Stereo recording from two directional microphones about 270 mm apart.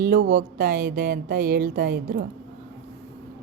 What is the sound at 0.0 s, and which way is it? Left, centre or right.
A woman's voice, right.